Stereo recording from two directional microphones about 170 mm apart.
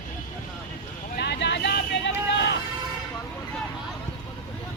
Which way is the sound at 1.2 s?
85° left.